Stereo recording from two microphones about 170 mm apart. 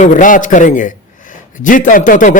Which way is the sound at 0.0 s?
50° left (ahead or behind).